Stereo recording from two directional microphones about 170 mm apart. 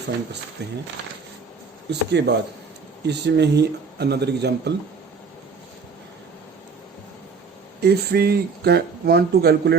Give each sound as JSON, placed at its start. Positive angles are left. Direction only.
{"t": 0.6, "sound": "speech", "side_deg": -75}
{"t": 1.9, "sound": "speech", "side_deg": -80}
{"t": 7.8, "sound": "speech", "side_deg": -70}